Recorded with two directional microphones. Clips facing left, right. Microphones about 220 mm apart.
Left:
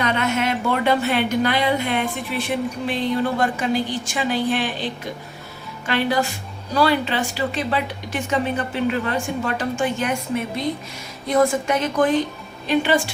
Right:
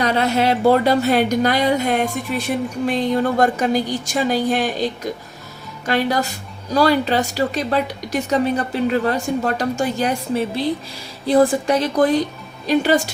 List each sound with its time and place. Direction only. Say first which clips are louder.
0.0 s a woman's voice: right 4 dB; 35° right (ahead or behind)